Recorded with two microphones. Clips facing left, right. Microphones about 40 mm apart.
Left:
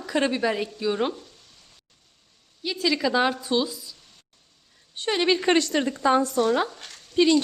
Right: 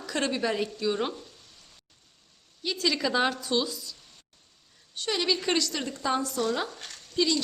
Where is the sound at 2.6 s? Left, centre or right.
Centre.